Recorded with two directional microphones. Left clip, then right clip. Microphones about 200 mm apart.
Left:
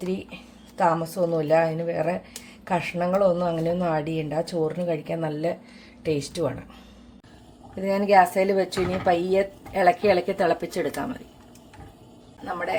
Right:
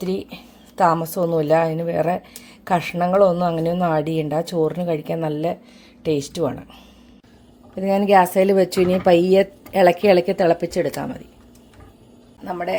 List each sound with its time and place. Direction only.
0.8 s speech: 40° right (ahead or behind)
7.8 s speech: 35° right (ahead or behind)